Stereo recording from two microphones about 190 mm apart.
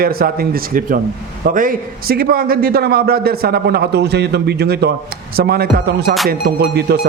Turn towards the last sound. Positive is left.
turn(degrees=-60)  # may be behind; listen again after turning